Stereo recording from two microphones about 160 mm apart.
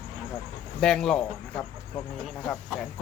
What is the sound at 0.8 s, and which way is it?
Speech, 5° left (ahead or behind).